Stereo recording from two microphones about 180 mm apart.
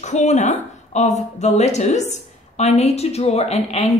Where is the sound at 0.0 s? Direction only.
40° left (ahead or behind).